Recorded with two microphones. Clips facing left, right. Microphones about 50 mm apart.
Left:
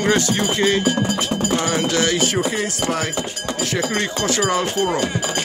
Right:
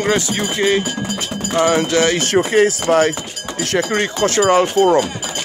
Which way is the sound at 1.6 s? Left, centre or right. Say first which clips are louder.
Right 5 dB; right.